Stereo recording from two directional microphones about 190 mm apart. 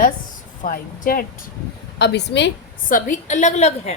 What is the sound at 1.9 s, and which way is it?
Speech, 65° left (ahead or behind).